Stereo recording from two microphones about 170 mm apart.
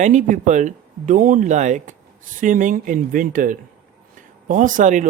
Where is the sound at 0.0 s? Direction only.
45° right (ahead or behind).